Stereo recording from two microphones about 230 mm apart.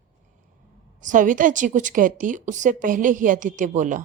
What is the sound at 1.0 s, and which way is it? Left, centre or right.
A woman's voice, right.